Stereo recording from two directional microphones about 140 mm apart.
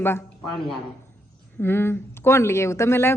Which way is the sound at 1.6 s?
15° left (ahead or behind).